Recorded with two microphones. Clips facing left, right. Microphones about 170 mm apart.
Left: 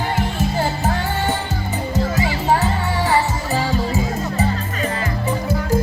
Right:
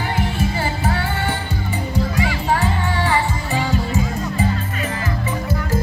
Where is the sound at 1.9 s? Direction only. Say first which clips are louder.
Left 1 dB; 40° left (ahead or behind).